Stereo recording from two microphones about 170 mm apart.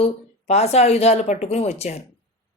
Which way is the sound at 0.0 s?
40° left (ahead or behind).